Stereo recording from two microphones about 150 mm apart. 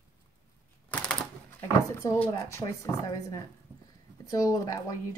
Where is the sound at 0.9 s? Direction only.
10° left (ahead or behind).